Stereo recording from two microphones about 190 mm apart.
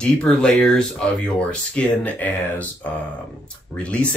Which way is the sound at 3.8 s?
5° left (ahead or behind).